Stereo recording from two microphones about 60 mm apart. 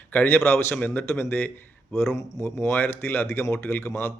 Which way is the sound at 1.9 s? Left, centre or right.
Left.